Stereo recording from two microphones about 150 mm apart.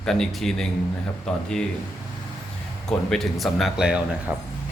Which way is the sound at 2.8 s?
5° left (ahead or behind).